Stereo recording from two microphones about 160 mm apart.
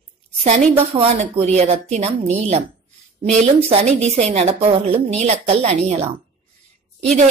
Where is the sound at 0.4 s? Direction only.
50° right (ahead or behind).